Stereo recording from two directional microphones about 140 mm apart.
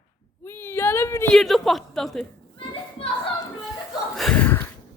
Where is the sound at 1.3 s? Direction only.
Centre (ahead or behind).